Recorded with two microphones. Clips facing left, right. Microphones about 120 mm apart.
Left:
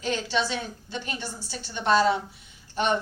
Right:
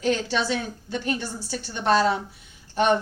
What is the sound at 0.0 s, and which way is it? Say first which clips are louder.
Speech: right 3 dB; 45° right (ahead or behind).